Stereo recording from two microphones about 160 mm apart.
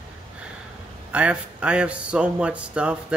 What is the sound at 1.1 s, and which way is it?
A man's voice, 5° right (ahead or behind).